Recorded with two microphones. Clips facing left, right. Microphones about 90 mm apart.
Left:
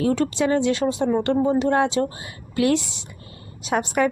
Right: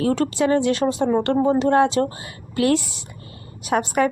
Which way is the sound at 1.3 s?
40° right (ahead or behind).